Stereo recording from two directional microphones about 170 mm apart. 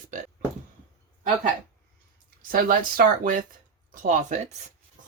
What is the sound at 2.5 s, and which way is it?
A woman's voice, 55° right (ahead or behind).